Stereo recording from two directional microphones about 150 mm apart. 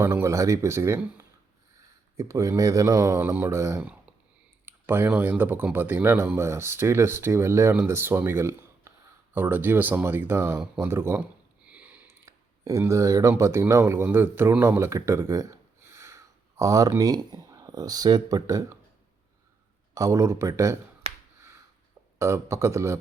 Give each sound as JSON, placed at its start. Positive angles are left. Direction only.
{"t": 0.0, "sound": "speech", "side_deg": -15}
{"t": 19.9, "sound": "speech", "side_deg": -20}
{"t": 21.0, "sound": "finger snapping", "side_deg": -40}
{"t": 22.2, "sound": "speech", "side_deg": -20}